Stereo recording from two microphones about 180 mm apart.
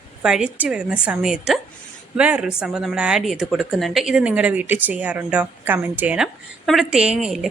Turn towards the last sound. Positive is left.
turn(degrees=0)  # may be behind; listen again after turning